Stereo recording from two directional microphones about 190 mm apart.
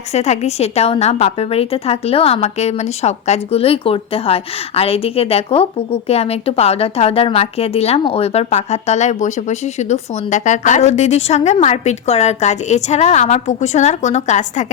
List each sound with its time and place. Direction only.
0.1 s a woman's voice: 35° left (ahead or behind)